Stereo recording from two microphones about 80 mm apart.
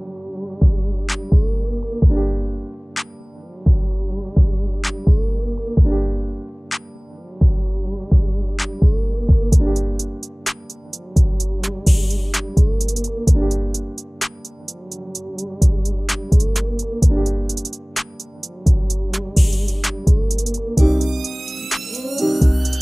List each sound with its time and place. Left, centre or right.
0.6 s music: centre
3.7 s heart sounds: centre
4.3 s music: centre
7.4 s heart sounds: centre
8.1 s music: centre